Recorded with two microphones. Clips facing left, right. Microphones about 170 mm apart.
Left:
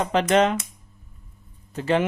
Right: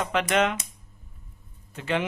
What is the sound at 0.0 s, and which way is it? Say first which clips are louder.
Speech: left 5 dB; 35° left (ahead or behind).